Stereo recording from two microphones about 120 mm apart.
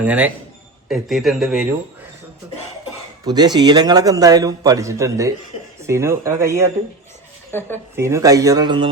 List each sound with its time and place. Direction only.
0.0 s a man's voice: 10° right (ahead or behind)
3.2 s a man's voice: 35° right (ahead or behind)
7.5 s speech: 20° left (ahead or behind)
7.9 s speech: 25° right (ahead or behind); by 8.9 s 40° right (ahead or behind)